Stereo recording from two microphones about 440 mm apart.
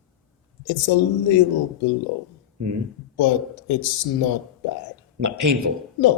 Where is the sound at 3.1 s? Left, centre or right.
Left.